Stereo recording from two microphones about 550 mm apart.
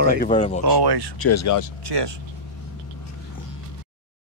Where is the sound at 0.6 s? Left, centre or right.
Right.